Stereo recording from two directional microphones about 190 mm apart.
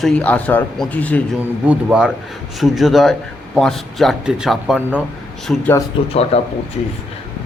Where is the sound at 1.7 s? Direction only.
5° right (ahead or behind).